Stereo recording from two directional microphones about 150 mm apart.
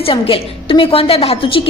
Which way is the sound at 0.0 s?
40° left (ahead or behind).